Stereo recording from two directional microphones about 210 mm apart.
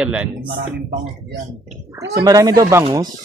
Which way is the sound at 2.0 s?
15° right (ahead or behind).